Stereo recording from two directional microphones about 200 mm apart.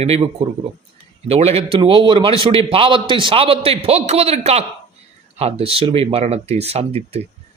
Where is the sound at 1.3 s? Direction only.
30° right (ahead or behind).